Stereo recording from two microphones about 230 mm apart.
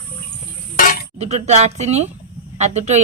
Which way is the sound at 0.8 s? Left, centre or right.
Left.